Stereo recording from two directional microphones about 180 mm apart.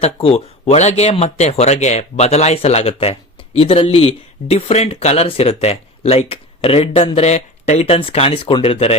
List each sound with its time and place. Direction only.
0.0 s speech: 35° left (ahead or behind)